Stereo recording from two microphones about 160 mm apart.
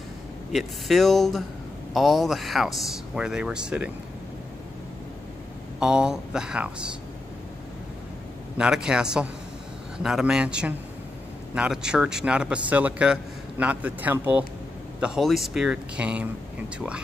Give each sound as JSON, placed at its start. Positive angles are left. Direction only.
{"t": 0.5, "sound": "speech", "side_deg": 0}
{"t": 5.8, "sound": "speech", "side_deg": -5}
{"t": 8.5, "sound": "speech", "side_deg": -5}